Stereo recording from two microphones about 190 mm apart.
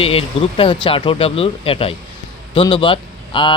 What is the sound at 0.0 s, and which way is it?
Speech, 30° left (ahead or behind).